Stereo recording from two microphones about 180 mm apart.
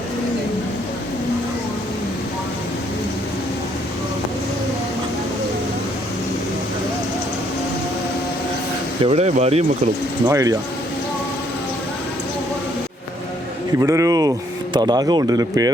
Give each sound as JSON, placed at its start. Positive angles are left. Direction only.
{"t": 9.0, "sound": "speech", "side_deg": -35}
{"t": 10.2, "sound": "speech", "side_deg": -20}
{"t": 13.7, "sound": "speech", "side_deg": -15}